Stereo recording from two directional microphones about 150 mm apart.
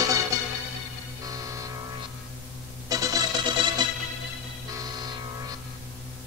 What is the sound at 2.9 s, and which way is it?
Music, 25° right (ahead or behind).